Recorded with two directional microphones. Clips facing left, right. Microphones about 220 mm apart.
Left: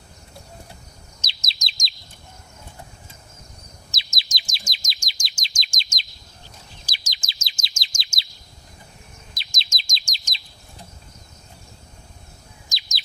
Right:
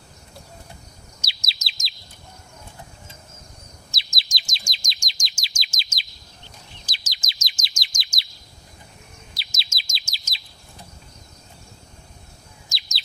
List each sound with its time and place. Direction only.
1.2 s bird: 10° right (ahead or behind)
3.9 s chirp: 20° left (ahead or behind)
4.9 s chirp: 5° left (ahead or behind)
5.4 s chirp: 5° right (ahead or behind)
6.8 s bird: 10° left (ahead or behind)
7.3 s chirp: 25° left (ahead or behind)
9.4 s chirp: 5° right (ahead or behind)
12.6 s bird: 15° left (ahead or behind)